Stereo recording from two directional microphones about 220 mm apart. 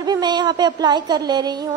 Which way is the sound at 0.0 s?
20° right (ahead or behind).